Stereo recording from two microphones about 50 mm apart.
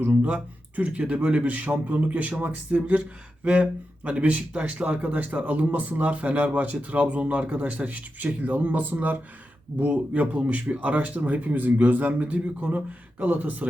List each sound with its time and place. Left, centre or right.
0.2 s speech: right